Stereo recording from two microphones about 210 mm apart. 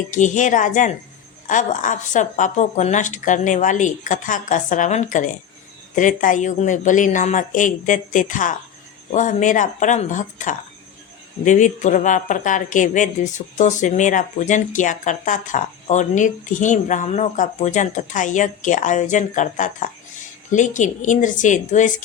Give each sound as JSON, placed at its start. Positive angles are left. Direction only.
{"t": 0.1, "sound": "speech", "side_deg": 35}